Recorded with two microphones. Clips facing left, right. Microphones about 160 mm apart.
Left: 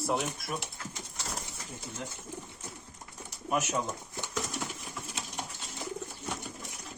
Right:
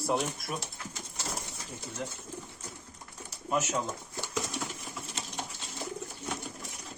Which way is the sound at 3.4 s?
10° left (ahead or behind).